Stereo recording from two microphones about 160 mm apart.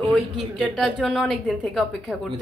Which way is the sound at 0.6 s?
Centre (ahead or behind).